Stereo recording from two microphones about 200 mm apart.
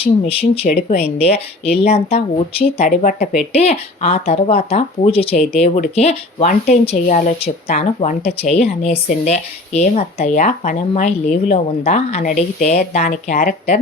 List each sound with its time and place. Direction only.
0.0 s speech: 30° left (ahead or behind)